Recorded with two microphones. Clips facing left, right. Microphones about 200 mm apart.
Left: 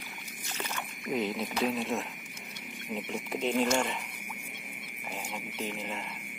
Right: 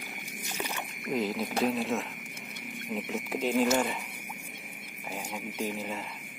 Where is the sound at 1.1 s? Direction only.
Centre (ahead or behind).